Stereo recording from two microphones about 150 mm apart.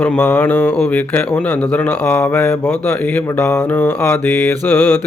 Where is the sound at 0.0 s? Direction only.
10° left (ahead or behind).